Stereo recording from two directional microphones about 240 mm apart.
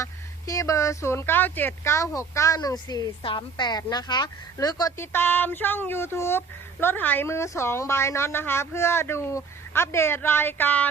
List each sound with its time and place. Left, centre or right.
0.0 s speech: centre